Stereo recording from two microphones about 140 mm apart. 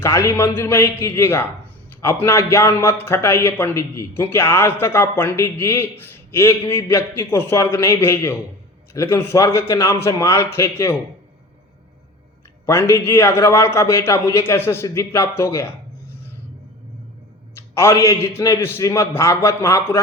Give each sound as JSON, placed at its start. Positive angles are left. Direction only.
{"t": 0.0, "sound": "a man's voice", "side_deg": 20}
{"t": 12.6, "sound": "a man's voice", "side_deg": 20}
{"t": 17.7, "sound": "a man's voice", "side_deg": 20}